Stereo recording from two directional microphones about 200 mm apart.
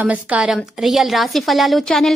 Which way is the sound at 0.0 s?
5° right (ahead or behind).